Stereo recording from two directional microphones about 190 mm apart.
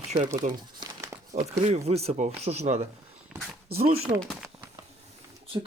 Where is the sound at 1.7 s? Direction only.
35° right (ahead or behind).